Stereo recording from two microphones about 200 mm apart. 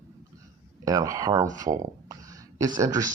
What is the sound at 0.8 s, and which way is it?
Speech, 15° right (ahead or behind).